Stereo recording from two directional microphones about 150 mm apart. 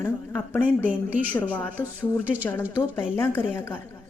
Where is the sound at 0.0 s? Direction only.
15° left (ahead or behind).